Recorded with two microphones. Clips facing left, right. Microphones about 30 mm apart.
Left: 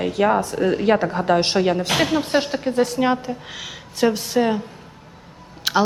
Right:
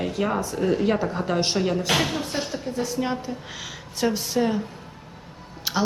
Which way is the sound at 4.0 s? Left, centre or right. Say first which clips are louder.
Left 5 dB; left.